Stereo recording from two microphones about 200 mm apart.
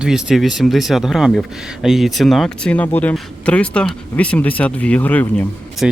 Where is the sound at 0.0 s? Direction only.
5° right (ahead or behind).